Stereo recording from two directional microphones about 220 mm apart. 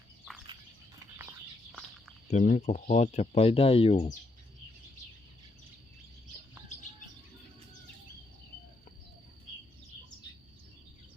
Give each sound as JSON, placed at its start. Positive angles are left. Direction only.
{"t": 2.2, "sound": "speech", "side_deg": 35}